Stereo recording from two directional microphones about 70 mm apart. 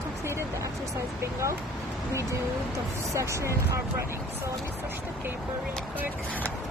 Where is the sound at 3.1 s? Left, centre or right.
Right.